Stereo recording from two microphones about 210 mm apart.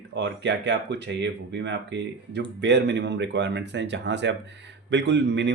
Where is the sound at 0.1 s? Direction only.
55° right (ahead or behind).